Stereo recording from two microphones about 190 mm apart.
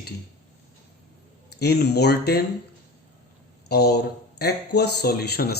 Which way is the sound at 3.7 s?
60° left (ahead or behind).